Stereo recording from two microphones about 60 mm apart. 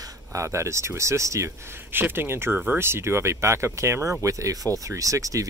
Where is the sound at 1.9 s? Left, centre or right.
Right.